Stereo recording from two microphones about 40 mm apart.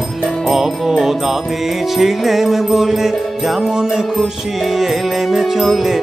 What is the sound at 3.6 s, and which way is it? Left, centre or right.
Music, centre.